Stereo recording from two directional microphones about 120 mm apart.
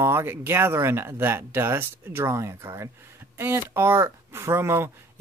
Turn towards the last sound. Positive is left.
turn(degrees=-20)  # may be behind; listen again after turning